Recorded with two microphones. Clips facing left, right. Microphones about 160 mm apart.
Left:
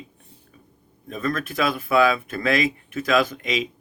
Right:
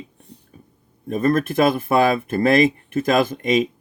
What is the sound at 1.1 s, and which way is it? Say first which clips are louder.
Speech: right 8 dB; 50° right (ahead or behind).